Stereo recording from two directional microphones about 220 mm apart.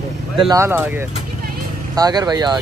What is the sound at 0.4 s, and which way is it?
Speech, 15° right (ahead or behind).